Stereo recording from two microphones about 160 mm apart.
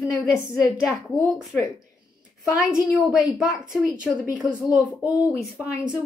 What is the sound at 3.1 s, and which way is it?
A woman's voice, 5° right (ahead or behind).